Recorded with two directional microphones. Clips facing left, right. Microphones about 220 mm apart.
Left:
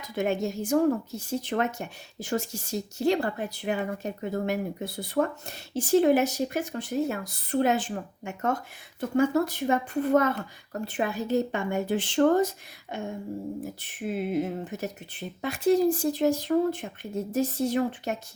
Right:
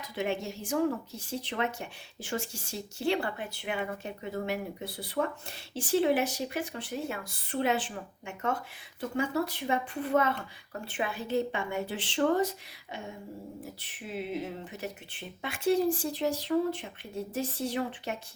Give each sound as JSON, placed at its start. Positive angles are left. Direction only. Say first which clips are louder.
{"t": 0.2, "sound": "a woman's voice", "louder": "left 6 dB", "side_deg": 45}